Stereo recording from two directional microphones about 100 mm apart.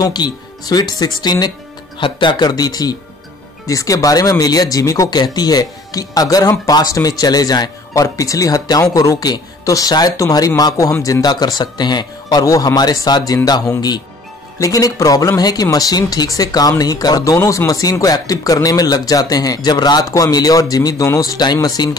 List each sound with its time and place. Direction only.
0.0 s speech: 45° left (ahead or behind)
2.0 s speech: 55° left (ahead or behind)